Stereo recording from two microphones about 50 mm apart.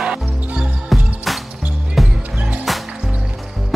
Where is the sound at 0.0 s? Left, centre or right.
Centre.